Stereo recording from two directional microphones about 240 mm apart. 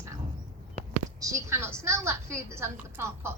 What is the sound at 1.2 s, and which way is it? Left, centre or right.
A woman's voice, centre.